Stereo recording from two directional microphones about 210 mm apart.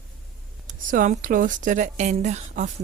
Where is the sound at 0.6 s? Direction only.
40° right (ahead or behind).